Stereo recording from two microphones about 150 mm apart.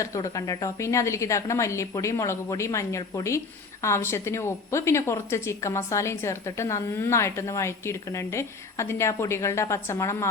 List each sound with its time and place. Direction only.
0.0 s a woman's voice: 20° left (ahead or behind)